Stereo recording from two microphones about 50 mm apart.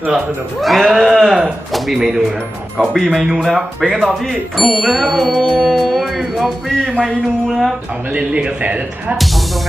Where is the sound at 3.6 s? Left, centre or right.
Centre.